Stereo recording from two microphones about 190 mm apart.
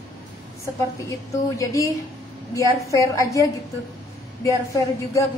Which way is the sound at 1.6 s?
15° left (ahead or behind).